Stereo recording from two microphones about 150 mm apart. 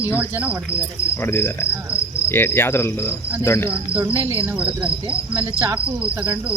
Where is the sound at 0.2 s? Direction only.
10° right (ahead or behind).